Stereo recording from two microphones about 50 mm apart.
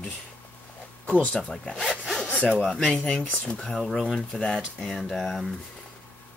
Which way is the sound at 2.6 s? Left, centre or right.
Centre.